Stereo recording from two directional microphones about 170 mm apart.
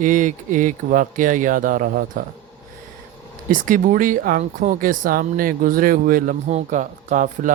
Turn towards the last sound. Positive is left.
turn(degrees=-45)  # may be behind; listen again after turning